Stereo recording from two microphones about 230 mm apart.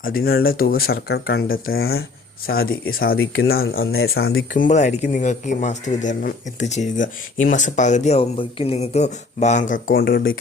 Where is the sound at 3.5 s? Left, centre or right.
Left.